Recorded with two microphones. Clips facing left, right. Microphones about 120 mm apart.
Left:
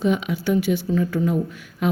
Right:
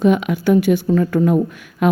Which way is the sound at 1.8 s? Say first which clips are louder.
Right 6 dB; 60° right (ahead or behind).